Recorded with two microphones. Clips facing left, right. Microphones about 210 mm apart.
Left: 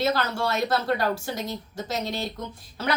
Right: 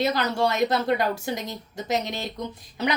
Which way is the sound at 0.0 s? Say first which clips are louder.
Right 2 dB; 20° right (ahead or behind).